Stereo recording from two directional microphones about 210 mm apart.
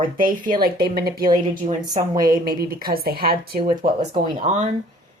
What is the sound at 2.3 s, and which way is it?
A woman's voice, 45° right (ahead or behind).